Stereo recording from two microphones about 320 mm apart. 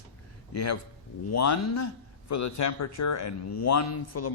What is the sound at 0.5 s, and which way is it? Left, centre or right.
Speech, left.